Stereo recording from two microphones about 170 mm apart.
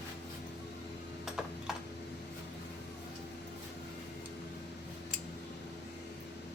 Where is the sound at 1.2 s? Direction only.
Centre (ahead or behind).